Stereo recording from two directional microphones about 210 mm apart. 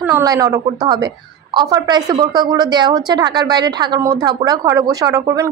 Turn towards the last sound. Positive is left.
turn(degrees=-15)  # may be behind; listen again after turning